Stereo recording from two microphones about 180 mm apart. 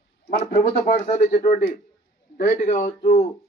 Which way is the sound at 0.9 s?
40° left (ahead or behind).